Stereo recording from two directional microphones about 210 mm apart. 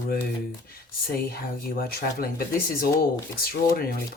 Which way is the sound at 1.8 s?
45° left (ahead or behind).